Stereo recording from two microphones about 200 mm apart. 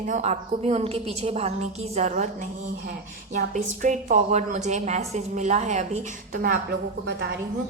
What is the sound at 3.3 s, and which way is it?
A woman's voice, 40° right (ahead or behind).